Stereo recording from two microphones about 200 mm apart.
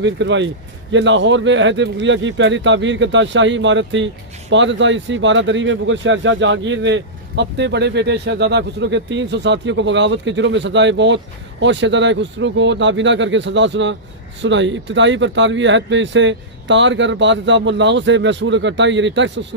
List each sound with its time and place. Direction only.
0.0 s speech: 65° right (ahead or behind)